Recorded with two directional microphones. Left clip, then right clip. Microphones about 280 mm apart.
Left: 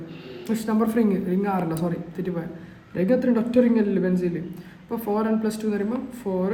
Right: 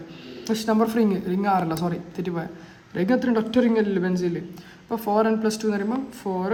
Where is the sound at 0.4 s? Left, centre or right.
Centre.